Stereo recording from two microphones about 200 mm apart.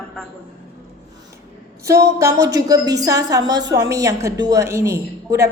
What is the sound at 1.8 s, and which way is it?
A woman's voice, 15° right (ahead or behind).